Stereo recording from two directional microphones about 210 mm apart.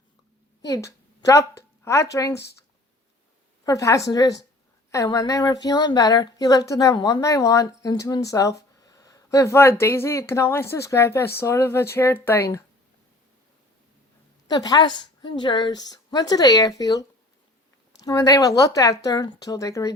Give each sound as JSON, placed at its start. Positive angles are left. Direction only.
{"t": 0.7, "sound": "a woman's voice", "side_deg": 15}
{"t": 3.6, "sound": "a woman's voice", "side_deg": 15}
{"t": 14.4, "sound": "a woman's voice", "side_deg": 20}